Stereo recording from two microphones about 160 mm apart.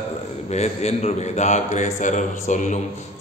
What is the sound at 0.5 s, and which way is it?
A man's voice, 45° left (ahead or behind).